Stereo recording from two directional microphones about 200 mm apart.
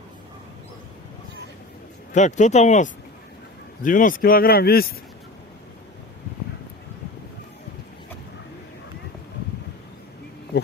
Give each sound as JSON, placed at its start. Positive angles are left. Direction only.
{"t": 2.1, "sound": "speech", "side_deg": 35}